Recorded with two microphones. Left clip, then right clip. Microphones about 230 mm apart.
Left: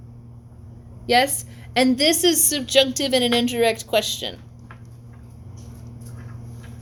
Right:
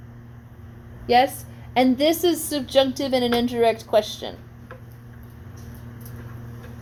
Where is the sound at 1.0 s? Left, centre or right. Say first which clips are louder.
Even; left.